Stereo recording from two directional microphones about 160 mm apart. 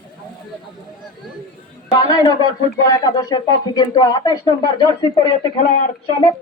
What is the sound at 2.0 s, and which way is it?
Speech, 25° left (ahead or behind).